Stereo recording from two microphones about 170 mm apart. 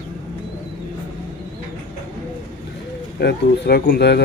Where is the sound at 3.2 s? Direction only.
70° left (ahead or behind).